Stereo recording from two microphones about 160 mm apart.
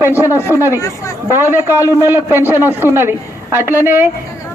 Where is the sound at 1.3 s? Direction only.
15° right (ahead or behind).